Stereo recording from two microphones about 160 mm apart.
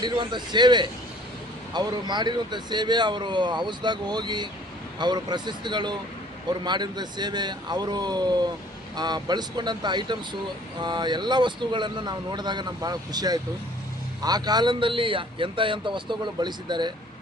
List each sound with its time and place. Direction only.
0.0 s speech: 30° right (ahead or behind)